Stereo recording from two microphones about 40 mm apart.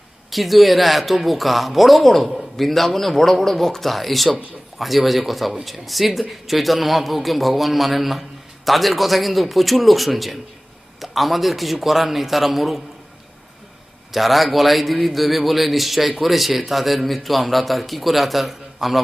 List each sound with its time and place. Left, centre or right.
0.3 s speech: centre
14.1 s speech: centre